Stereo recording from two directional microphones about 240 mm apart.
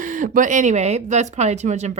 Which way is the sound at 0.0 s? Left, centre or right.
Right.